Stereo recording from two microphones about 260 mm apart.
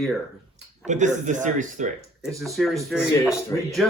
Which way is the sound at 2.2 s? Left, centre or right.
Centre.